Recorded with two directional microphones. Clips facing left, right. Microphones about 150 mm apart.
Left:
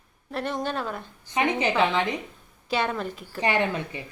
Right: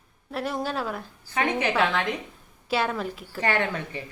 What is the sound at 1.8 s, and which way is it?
Speech, 20° left (ahead or behind).